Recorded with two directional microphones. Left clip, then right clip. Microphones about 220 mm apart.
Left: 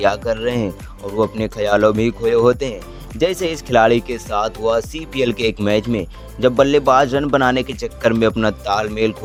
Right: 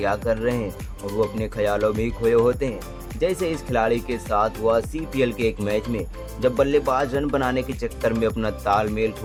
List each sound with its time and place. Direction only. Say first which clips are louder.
0.0 s speech: left 5 dB; 35° left (ahead or behind)